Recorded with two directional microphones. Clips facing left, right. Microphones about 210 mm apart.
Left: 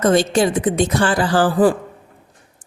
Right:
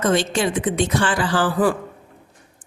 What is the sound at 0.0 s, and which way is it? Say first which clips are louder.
Speech: left 4 dB; 40° left (ahead or behind).